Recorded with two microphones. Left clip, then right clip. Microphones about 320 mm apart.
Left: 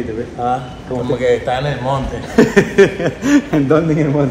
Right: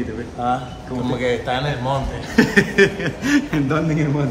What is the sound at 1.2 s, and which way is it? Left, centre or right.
Speech, centre.